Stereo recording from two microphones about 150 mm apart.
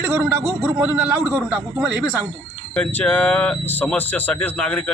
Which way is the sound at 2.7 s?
10° left (ahead or behind).